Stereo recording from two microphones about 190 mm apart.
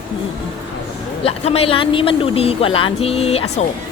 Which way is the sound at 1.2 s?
30° left (ahead or behind).